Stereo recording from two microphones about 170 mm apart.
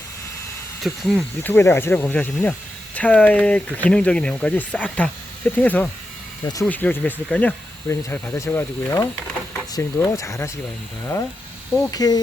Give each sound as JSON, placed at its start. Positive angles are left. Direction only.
{"t": 0.8, "sound": "speech", "side_deg": 0}
{"t": 1.4, "sound": "speech", "side_deg": 10}
{"t": 11.9, "sound": "speech", "side_deg": 20}